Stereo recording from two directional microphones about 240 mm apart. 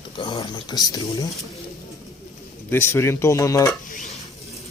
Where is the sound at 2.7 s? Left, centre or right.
Centre.